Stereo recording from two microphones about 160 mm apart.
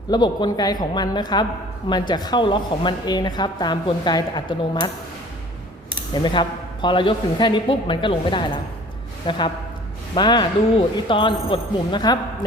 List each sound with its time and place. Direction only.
0.1 s a woman's voice: 25° left (ahead or behind)
6.2 s a man's voice: 30° left (ahead or behind)